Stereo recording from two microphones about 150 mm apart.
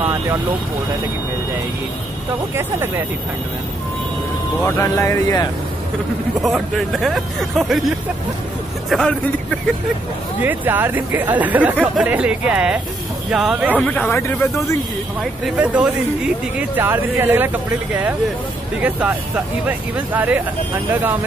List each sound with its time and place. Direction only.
0.0 s speech: 15° right (ahead or behind)
4.6 s speech: 15° left (ahead or behind)
6.4 s speech: centre (ahead or behind)
8.9 s speech: 5° left (ahead or behind)
10.4 s speech: 10° right (ahead or behind)
13.7 s speech: 10° left (ahead or behind)
15.4 s speech: 5° right (ahead or behind)
18.8 s speech: 10° right (ahead or behind)